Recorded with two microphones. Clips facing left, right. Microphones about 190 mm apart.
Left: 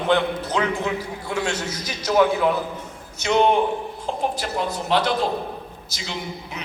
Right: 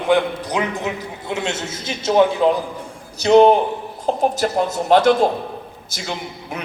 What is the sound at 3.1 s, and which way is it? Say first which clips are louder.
A man's voice: right 7 dB; 35° right (ahead or behind).